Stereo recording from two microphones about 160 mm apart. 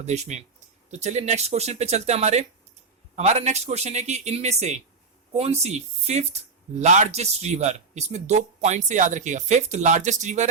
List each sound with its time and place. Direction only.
0.0 s speech: 45° right (ahead or behind)